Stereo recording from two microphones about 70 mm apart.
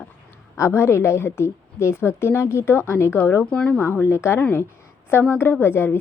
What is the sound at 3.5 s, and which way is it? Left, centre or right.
Speech, centre.